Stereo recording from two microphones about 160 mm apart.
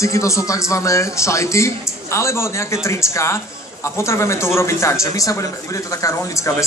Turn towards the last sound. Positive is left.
turn(degrees=20)  # may be behind; listen again after turning